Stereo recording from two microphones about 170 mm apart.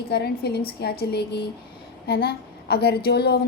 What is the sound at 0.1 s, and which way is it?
A woman's voice, 70° left (ahead or behind).